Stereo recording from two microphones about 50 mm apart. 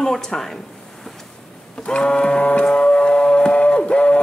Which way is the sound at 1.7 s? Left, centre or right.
Centre.